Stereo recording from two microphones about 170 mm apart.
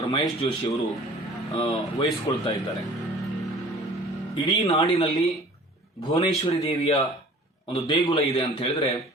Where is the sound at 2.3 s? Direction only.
25° left (ahead or behind).